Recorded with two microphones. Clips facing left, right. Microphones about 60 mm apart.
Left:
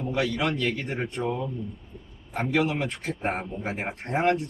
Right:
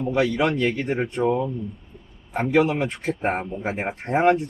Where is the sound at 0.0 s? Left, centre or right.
Centre.